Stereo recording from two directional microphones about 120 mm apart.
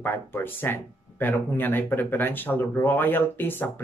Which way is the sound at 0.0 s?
20° left (ahead or behind).